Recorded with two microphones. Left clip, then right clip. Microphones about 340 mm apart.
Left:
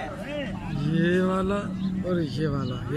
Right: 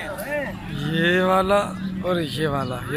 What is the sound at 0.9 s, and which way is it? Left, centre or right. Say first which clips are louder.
Speech: right 7 dB; centre.